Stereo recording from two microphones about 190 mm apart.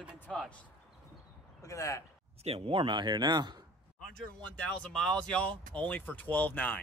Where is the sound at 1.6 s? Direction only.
15° left (ahead or behind).